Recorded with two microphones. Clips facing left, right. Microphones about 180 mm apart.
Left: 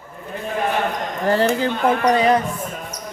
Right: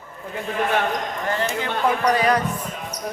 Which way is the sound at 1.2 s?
35° left (ahead or behind).